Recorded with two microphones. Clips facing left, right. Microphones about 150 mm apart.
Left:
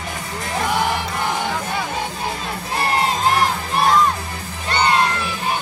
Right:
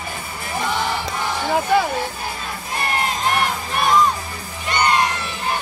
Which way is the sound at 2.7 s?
30° left (ahead or behind).